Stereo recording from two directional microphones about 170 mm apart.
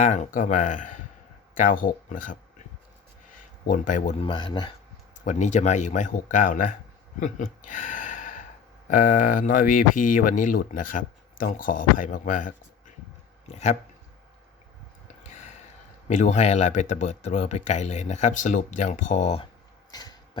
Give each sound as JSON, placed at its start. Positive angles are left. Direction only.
{"t": 0.0, "sound": "speech", "side_deg": 45}
{"t": 3.7, "sound": "speech", "side_deg": 50}
{"t": 4.2, "sound": "speech", "side_deg": 30}
{"t": 5.2, "sound": "speech", "side_deg": 45}
{"t": 15.0, "sound": "a sound", "side_deg": 45}
{"t": 16.0, "sound": "speech", "side_deg": 45}
{"t": 19.9, "sound": "a sound", "side_deg": 20}